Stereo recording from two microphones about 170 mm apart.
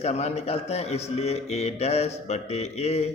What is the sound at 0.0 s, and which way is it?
A man's voice, 40° left (ahead or behind).